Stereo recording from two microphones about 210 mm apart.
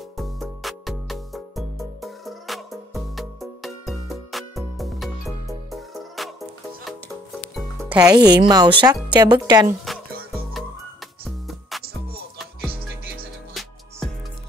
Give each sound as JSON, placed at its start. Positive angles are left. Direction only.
{"t": 0.2, "sound": "music", "side_deg": 0}
{"t": 7.9, "sound": "a woman's voice", "side_deg": -20}
{"t": 11.2, "sound": "music", "side_deg": 0}
{"t": 13.6, "sound": "music", "side_deg": 0}